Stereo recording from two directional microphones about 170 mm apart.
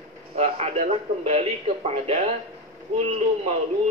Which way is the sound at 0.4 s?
40° right (ahead or behind).